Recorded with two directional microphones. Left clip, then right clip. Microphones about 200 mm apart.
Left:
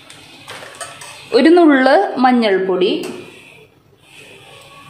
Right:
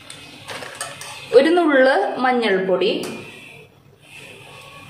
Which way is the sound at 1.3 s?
30° left (ahead or behind).